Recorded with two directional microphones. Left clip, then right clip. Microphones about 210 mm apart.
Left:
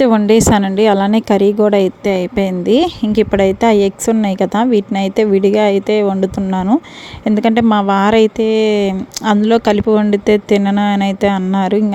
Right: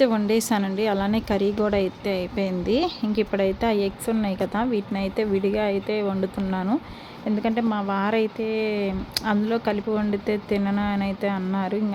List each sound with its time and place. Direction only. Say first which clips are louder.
0.0 s a woman's voice: left 11 dB; 40° left (ahead or behind)
7.3 s speech: left 12 dB; 45° left (ahead or behind)